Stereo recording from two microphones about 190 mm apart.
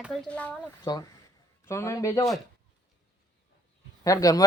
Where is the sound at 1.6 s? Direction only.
15° left (ahead or behind).